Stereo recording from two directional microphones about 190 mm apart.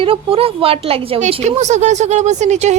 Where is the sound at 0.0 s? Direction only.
30° right (ahead or behind).